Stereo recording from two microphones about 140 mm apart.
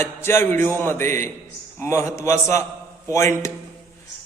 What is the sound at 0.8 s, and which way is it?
A man's voice, 15° left (ahead or behind).